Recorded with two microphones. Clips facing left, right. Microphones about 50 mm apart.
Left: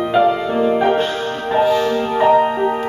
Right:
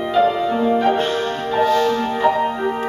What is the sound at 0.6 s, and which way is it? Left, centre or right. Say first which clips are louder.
Music: left 2 dB; left.